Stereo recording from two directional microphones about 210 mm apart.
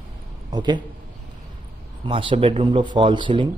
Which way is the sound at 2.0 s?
25° right (ahead or behind).